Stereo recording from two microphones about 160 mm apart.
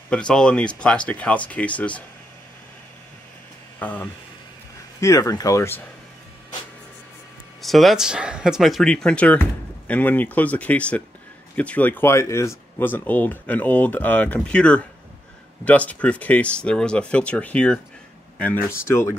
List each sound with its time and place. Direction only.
0.1 s speech: 5° left (ahead or behind)
3.8 s speech: 10° left (ahead or behind)
7.6 s speech: centre (ahead or behind); by 19.1 s 15° left (ahead or behind)